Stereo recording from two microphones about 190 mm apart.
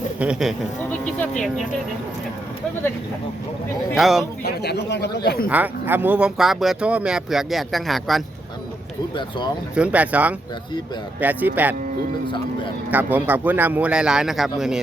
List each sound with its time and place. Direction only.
0.2 s speech: 5° right (ahead or behind)
3.9 s speech: centre (ahead or behind)
4.4 s speech: 60° left (ahead or behind)
5.5 s speech: 10° right (ahead or behind)
9.7 s speech: 5° right (ahead or behind)
12.9 s speech: 10° right (ahead or behind)